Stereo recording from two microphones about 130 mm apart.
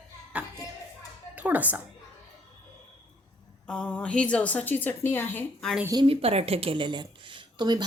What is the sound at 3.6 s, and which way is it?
A woman's voice, 5° left (ahead or behind).